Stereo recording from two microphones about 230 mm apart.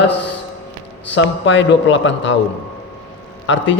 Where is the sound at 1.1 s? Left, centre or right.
Left.